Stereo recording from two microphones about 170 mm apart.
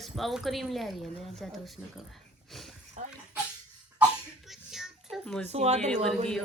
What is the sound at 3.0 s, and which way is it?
Bathtub, 45° right (ahead or behind).